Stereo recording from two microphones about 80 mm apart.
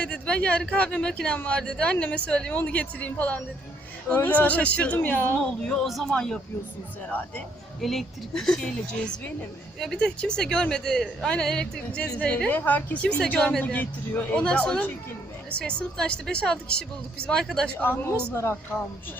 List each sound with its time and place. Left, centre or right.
0.0 s speech: centre
5.6 s speech: centre
7.1 s speech: left
7.8 s speech: centre; by 13.0 s left
13.0 s speech: centre
17.7 s speech: left